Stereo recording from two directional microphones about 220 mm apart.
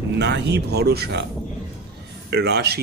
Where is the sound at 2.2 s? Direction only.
50° right (ahead or behind).